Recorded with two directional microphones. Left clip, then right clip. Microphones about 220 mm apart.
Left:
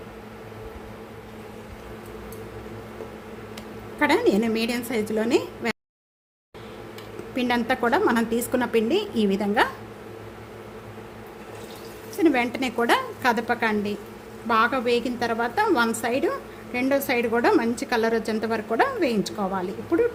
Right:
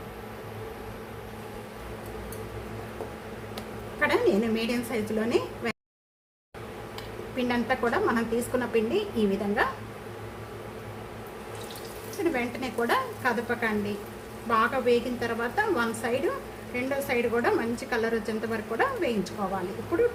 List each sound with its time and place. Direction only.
4.0 s a woman's voice: 45° left (ahead or behind)
7.3 s a woman's voice: 45° left (ahead or behind)
12.2 s a woman's voice: 45° left (ahead or behind)